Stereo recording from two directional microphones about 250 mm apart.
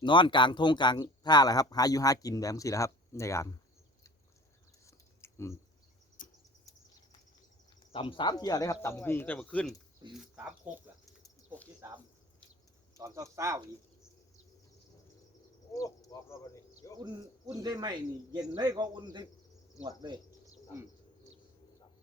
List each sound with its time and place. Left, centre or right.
0.0 s speech: centre
4.9 s a sound: centre
6.2 s cricket: left
7.9 s speech: centre
13.0 s speech: centre
15.7 s speech: centre
17.0 s speech: centre
20.0 s cricket: centre